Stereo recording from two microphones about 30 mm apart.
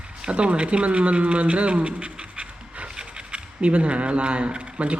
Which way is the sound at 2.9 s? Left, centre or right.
Right.